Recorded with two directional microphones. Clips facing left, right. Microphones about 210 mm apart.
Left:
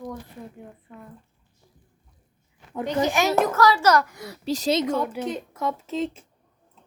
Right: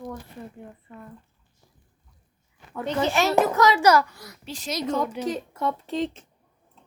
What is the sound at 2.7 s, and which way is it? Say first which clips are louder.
Speech: left 1 dB; 15° left (ahead or behind).